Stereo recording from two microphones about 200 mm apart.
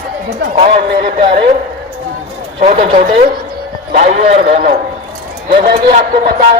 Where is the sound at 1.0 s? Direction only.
30° right (ahead or behind).